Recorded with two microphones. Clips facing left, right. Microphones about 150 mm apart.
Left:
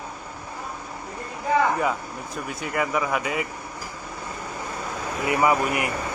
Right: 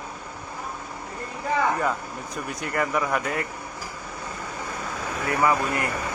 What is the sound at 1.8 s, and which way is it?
Speech, 5° left (ahead or behind).